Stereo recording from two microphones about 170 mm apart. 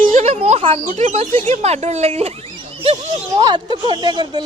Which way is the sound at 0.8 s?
50° right (ahead or behind).